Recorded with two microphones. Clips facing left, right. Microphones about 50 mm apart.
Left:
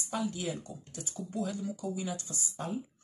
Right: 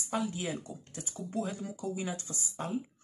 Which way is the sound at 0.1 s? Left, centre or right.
Right.